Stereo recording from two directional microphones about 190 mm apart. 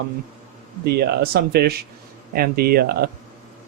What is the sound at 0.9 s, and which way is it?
Speech, 55° right (ahead or behind).